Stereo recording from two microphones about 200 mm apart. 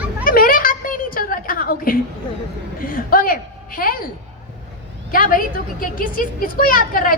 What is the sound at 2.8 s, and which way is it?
Speech, 45° left (ahead or behind).